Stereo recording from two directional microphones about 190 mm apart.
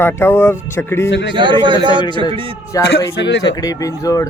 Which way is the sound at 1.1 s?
65° left (ahead or behind).